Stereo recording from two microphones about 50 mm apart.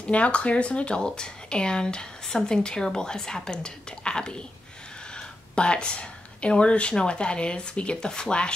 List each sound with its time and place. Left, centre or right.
0.0 s a woman's voice: left